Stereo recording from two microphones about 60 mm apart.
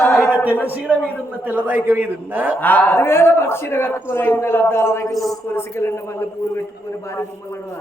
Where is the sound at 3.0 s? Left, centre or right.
Left.